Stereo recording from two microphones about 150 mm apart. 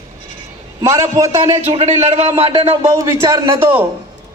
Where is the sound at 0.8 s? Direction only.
20° right (ahead or behind).